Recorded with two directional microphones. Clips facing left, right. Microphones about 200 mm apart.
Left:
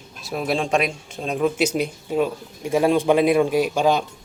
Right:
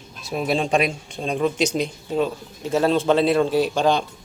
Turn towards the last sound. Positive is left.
turn(degrees=5)  # may be behind; listen again after turning